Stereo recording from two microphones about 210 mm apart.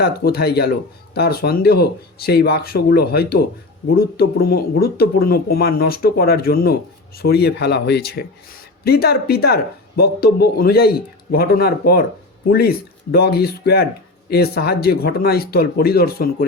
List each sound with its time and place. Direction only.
0.0 s speech: 50° left (ahead or behind)